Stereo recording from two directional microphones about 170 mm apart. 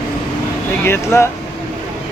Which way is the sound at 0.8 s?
15° left (ahead or behind).